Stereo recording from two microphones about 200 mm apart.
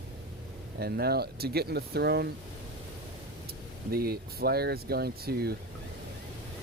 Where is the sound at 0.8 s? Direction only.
50° right (ahead or behind).